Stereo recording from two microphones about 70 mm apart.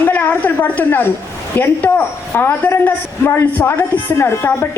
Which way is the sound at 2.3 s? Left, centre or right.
Left.